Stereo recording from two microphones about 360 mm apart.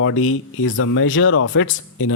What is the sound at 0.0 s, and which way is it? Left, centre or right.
Speech, left.